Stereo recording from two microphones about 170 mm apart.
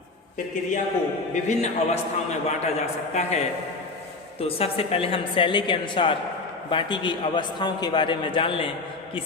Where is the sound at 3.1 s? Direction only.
40° left (ahead or behind).